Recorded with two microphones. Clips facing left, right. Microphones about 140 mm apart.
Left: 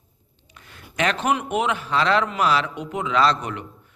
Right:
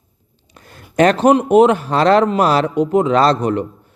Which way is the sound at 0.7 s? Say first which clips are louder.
Right 11 dB; 40° right (ahead or behind).